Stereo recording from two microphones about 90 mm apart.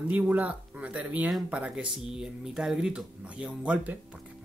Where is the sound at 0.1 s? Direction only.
15° right (ahead or behind).